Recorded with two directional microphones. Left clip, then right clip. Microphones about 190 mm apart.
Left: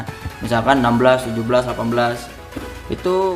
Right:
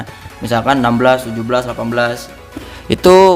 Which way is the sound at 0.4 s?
30° right (ahead or behind).